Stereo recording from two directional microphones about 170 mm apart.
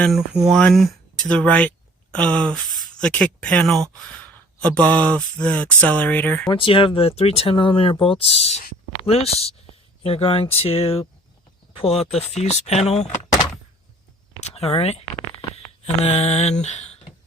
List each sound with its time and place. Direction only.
0.0 s speech: centre (ahead or behind)
6.5 s speech: 30° left (ahead or behind)
14.4 s speech: 40° left (ahead or behind)
16.0 s speech: 40° left (ahead or behind)